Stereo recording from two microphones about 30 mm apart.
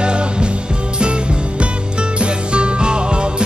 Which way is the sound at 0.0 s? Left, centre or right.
Right.